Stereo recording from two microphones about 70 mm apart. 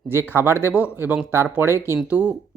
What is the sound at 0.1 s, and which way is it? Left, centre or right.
Speech, right.